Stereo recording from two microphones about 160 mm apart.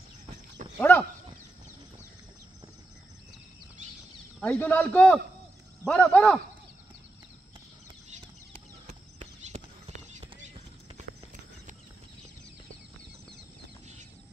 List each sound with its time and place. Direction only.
0.7 s a sound: 10° left (ahead or behind)
4.4 s a man's voice: 10° left (ahead or behind)
8.8 s horse: 45° right (ahead or behind)